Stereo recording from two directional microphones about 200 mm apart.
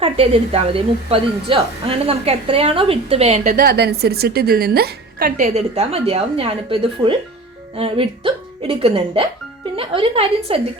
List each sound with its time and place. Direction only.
0.0 s a woman's voice: 30° right (ahead or behind); by 5.5 s 50° right (ahead or behind)
5.5 s speech: 30° right (ahead or behind)